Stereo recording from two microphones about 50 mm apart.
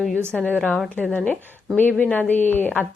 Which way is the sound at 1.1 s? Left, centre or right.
Left.